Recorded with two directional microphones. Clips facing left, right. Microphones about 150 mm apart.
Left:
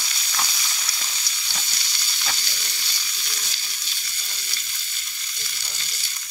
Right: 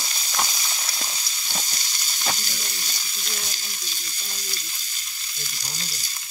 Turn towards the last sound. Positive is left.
turn(degrees=-40)  # may be behind; listen again after turning